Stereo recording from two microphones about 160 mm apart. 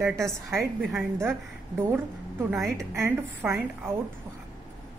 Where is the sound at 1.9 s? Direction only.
15° right (ahead or behind).